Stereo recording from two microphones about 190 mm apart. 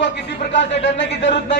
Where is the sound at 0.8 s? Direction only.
70° left (ahead or behind).